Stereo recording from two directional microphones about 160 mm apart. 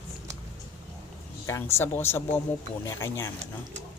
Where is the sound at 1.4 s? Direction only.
15° left (ahead or behind).